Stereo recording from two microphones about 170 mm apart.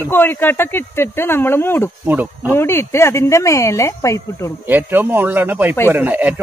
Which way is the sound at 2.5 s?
15° left (ahead or behind).